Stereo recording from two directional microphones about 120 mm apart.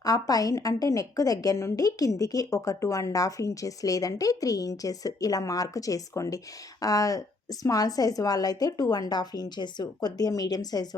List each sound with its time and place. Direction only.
0.0 s a woman's voice: 30° left (ahead or behind)